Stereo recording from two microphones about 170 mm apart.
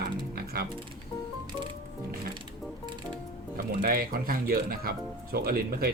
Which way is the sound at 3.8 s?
60° right (ahead or behind).